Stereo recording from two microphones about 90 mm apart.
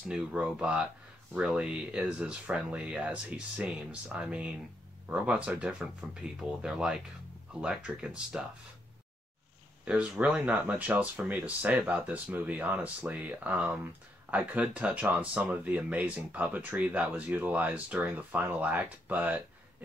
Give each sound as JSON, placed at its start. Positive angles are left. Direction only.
{"t": 0.1, "sound": "speech", "side_deg": -10}
{"t": 9.8, "sound": "speech", "side_deg": -15}